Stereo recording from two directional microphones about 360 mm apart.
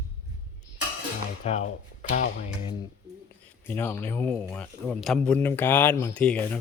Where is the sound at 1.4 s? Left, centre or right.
Centre.